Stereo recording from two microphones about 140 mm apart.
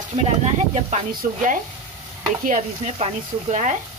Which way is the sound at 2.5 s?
55° right (ahead or behind).